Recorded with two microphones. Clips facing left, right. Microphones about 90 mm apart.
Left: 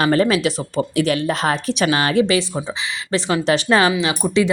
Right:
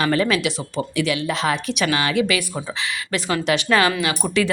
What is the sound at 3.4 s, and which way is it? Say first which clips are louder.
Speech: left 2 dB; 30° left (ahead or behind).